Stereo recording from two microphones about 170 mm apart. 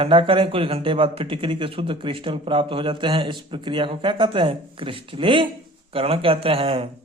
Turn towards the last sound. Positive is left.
turn(degrees=-35)  # may be behind; listen again after turning